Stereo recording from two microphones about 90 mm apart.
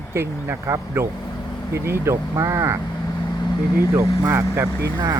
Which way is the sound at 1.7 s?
30° right (ahead or behind).